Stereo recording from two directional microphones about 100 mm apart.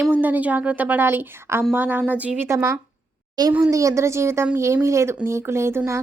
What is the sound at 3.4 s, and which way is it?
A woman's voice, 40° right (ahead or behind).